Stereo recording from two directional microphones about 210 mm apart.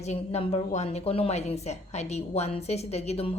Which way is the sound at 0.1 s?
30° left (ahead or behind).